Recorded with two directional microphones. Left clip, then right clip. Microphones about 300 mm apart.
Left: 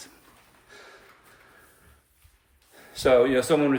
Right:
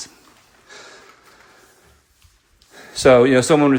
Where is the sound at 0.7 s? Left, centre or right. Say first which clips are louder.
Right 8 dB; right.